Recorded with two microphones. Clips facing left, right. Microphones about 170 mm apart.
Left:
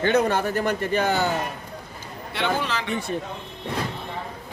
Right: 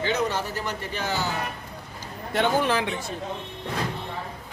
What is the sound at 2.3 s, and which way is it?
Speech, 50° right (ahead or behind).